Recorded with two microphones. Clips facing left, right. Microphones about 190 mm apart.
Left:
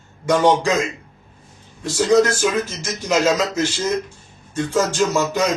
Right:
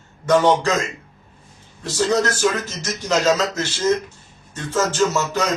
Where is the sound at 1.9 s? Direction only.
10° left (ahead or behind).